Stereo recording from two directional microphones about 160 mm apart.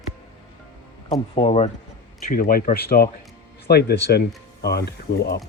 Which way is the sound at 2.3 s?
65° left (ahead or behind).